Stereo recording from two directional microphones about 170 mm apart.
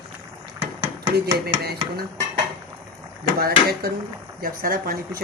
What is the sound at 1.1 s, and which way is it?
Speech, 65° right (ahead or behind).